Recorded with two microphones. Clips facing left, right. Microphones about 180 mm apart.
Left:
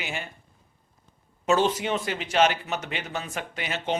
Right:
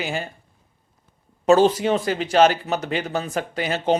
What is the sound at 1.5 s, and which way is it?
A man's voice, 35° right (ahead or behind).